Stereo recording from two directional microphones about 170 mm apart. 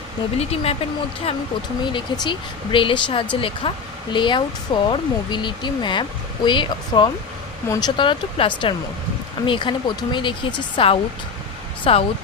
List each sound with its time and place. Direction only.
0.3 s speech: 35° left (ahead or behind)